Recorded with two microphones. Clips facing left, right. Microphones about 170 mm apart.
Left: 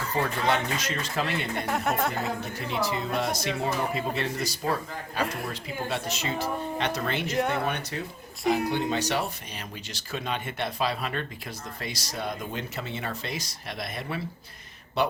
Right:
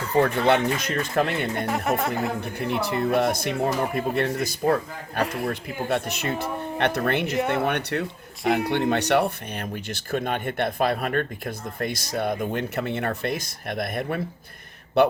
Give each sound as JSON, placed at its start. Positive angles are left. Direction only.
{"t": 0.2, "sound": "speech", "side_deg": -60}
{"t": 1.5, "sound": "speech", "side_deg": 0}
{"t": 2.2, "sound": "speech", "side_deg": -60}